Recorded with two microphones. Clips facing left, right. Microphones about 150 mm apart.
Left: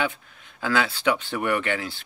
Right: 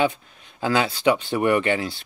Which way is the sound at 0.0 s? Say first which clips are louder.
Right 5 dB; 20° right (ahead or behind).